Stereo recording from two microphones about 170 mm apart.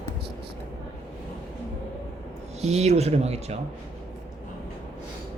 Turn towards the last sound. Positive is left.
turn(degrees=-40)  # may be behind; listen again after turning